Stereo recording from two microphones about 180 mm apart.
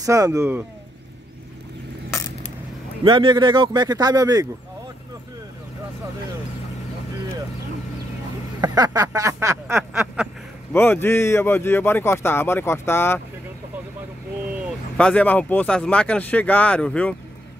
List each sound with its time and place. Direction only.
0.0 s speech: 20° right (ahead or behind)
2.0 s coin: 15° left (ahead or behind)
3.0 s speech: 30° right (ahead or behind)
8.5 s speech: 20° right (ahead or behind)
10.7 s speech: 10° left (ahead or behind)
15.0 s speech: 5° left (ahead or behind)